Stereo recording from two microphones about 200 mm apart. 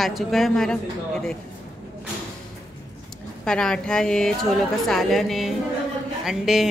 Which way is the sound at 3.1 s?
5° left (ahead or behind).